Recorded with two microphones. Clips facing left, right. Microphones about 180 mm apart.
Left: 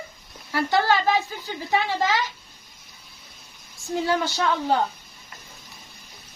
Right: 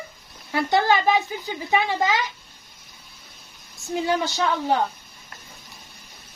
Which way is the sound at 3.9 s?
20° right (ahead or behind).